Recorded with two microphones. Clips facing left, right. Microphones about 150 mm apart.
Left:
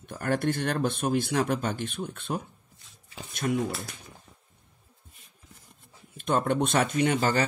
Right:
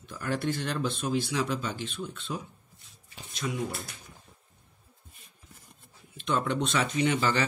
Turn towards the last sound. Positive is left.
turn(degrees=40)  # may be behind; listen again after turning